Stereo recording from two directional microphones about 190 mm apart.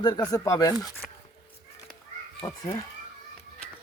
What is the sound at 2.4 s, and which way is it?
Speech, 15° left (ahead or behind).